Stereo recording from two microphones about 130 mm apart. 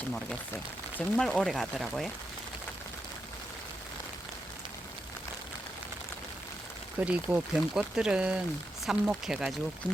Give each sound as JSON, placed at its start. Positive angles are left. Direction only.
{"t": 0.9, "sound": "speech", "side_deg": 5}
{"t": 7.0, "sound": "speech", "side_deg": -10}
{"t": 9.8, "sound": "speech", "side_deg": -35}